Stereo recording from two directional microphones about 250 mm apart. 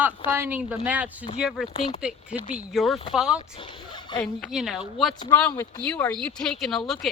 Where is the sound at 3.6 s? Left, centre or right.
Centre.